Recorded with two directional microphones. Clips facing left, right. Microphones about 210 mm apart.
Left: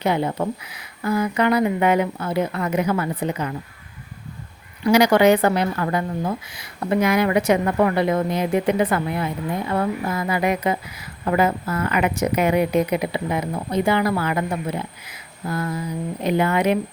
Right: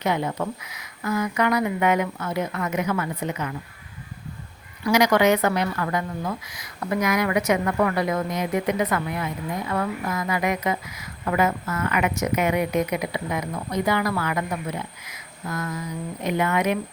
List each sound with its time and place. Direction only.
0.0 s speech: 30° left (ahead or behind)
4.8 s speech: 30° left (ahead or behind)